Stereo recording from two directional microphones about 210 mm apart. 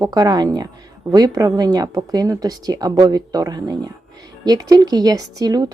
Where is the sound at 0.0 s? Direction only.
20° right (ahead or behind).